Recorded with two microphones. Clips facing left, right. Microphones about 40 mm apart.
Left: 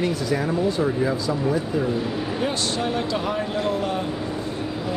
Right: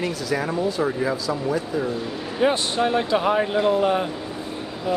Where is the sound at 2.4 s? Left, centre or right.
Right.